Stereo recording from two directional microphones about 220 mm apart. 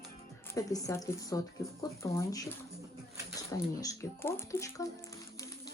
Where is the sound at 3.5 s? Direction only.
15° left (ahead or behind).